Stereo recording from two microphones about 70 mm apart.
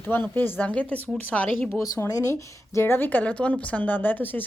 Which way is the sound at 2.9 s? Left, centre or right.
Left.